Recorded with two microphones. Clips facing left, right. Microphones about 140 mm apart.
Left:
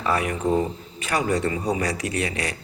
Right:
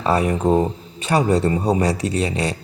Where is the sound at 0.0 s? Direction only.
30° right (ahead or behind).